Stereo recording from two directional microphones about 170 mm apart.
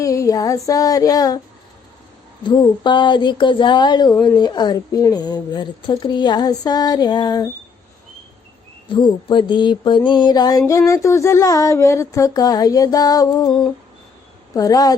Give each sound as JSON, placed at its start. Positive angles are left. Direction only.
{"t": 0.0, "sound": "speech", "side_deg": 20}
{"t": 2.4, "sound": "speech", "side_deg": 25}
{"t": 8.9, "sound": "speech", "side_deg": 30}